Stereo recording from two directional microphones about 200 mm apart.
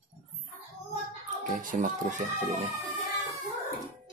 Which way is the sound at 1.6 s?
40° right (ahead or behind).